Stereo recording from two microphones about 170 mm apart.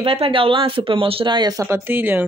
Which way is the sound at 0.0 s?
35° right (ahead or behind).